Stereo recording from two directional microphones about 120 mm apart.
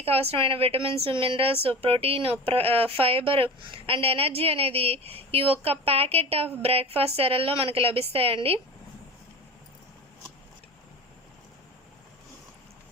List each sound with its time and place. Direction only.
0.0 s speech: 55° right (ahead or behind)